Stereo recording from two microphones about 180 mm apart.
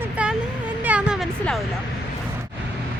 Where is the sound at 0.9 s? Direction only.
5° right (ahead or behind).